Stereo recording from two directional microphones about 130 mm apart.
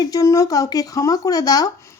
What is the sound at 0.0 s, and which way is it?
A woman's voice, 25° left (ahead or behind).